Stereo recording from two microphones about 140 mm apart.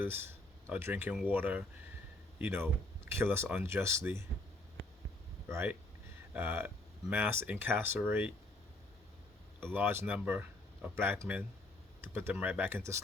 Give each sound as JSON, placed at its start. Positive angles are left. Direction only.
{"t": 0.0, "sound": "speech", "side_deg": -15}
{"t": 5.5, "sound": "speech", "side_deg": -15}
{"t": 9.7, "sound": "speech", "side_deg": -15}